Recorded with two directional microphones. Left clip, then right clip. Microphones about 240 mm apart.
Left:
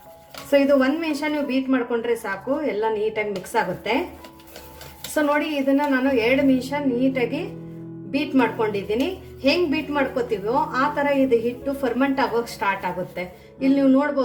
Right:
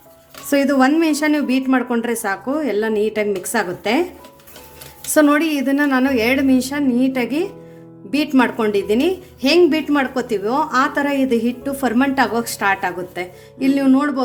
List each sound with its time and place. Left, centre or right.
0.5 s a woman's voice: right
5.1 s a woman's voice: right